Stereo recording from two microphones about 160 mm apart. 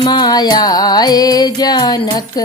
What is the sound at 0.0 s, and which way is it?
Music, 25° left (ahead or behind).